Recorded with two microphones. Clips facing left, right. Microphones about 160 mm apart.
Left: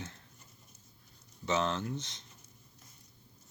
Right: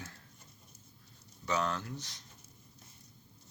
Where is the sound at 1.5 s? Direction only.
25° left (ahead or behind).